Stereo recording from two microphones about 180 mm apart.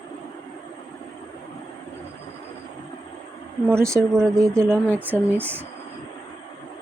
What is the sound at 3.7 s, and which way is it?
Speech, 15° right (ahead or behind).